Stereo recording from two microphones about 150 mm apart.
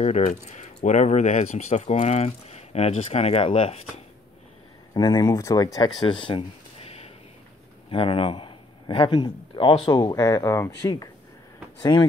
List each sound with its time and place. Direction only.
0.0 s speech: 50° left (ahead or behind)
4.9 s a man's voice: 25° left (ahead or behind)
10.1 s speech: 20° left (ahead or behind)